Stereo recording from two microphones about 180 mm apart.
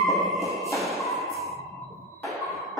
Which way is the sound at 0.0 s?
Centre (ahead or behind).